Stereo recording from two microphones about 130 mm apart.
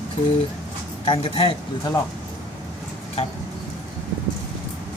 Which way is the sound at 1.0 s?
45° left (ahead or behind).